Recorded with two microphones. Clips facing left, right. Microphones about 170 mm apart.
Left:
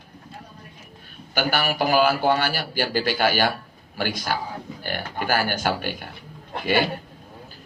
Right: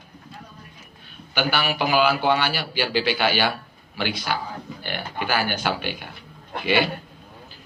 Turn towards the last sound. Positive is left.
turn(degrees=45)  # may be behind; listen again after turning